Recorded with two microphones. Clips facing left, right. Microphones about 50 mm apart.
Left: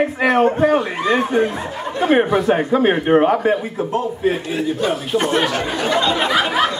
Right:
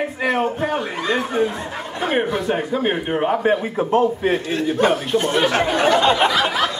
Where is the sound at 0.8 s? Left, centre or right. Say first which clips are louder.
Left 4 dB; left.